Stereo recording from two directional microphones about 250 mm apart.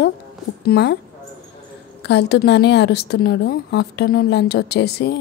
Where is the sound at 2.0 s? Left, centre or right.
Left.